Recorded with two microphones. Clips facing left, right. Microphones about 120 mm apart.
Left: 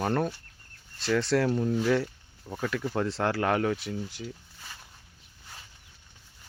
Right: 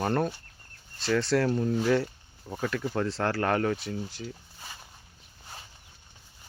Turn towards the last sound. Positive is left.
turn(degrees=-15)  # may be behind; listen again after turning